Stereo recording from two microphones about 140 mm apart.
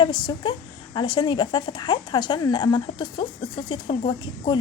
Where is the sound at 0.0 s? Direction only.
35° left (ahead or behind).